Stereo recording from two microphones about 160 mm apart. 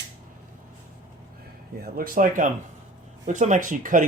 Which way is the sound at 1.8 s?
60° right (ahead or behind).